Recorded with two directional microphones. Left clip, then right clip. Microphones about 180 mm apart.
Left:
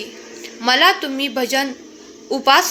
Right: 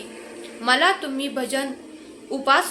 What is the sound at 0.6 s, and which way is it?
A woman's voice, 25° left (ahead or behind).